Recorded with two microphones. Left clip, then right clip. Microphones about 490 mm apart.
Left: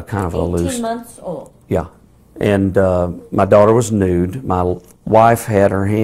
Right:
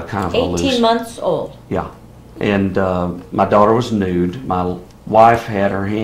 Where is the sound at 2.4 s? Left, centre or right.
Left.